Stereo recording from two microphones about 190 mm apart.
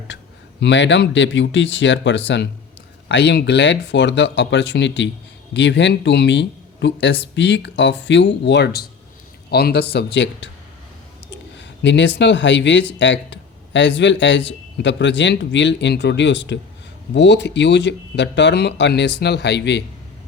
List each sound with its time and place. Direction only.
0.6 s speech: 70° left (ahead or behind)